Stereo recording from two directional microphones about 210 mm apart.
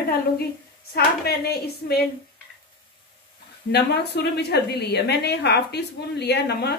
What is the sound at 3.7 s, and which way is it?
A woman's voice, 50° left (ahead or behind).